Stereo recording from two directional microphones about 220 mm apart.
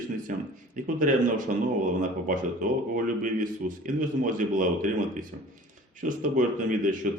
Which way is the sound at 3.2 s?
35° right (ahead or behind).